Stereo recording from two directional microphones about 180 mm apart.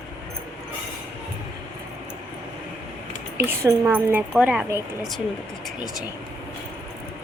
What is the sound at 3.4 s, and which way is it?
A woman's voice, 10° right (ahead or behind).